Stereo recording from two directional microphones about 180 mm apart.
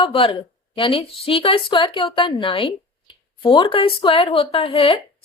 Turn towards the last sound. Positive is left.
turn(degrees=30)  # may be behind; listen again after turning